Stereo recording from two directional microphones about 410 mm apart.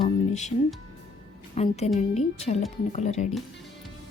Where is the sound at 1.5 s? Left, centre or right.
Centre.